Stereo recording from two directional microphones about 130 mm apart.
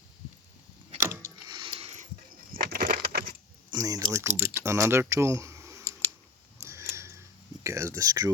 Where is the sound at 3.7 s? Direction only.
30° right (ahead or behind).